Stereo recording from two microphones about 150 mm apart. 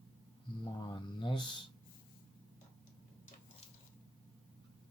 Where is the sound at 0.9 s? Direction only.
30° left (ahead or behind).